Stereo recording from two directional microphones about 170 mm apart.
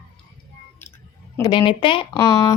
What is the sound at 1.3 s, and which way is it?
A woman's voice, 20° left (ahead or behind).